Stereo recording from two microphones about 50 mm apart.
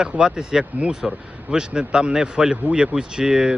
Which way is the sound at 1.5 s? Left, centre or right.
Centre.